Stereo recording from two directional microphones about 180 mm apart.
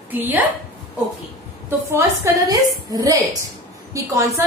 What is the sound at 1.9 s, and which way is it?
A woman's voice, 20° right (ahead or behind).